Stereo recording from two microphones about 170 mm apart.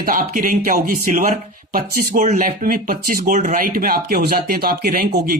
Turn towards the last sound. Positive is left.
turn(degrees=-60)  # may be behind; listen again after turning